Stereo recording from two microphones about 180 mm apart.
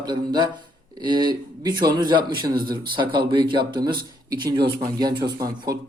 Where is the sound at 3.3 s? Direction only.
25° right (ahead or behind).